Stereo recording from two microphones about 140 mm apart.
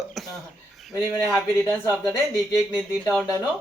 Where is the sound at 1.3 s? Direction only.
20° left (ahead or behind).